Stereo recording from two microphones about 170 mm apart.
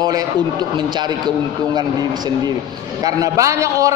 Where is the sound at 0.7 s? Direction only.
25° right (ahead or behind).